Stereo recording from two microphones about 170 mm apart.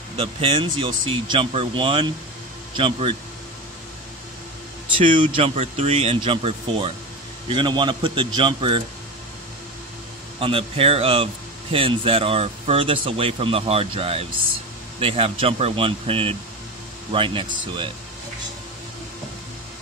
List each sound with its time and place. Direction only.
0.2 s speech: 30° right (ahead or behind)
5.0 s a man's voice: 30° right (ahead or behind)
10.4 s a man's voice: 35° right (ahead or behind)